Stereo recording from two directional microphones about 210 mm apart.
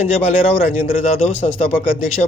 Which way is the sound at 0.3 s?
30° left (ahead or behind).